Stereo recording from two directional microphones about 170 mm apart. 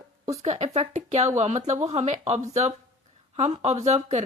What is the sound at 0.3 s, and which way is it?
A woman's voice, 40° right (ahead or behind).